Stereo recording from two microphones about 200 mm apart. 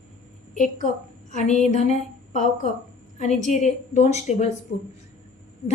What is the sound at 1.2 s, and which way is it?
Speech, 35° left (ahead or behind).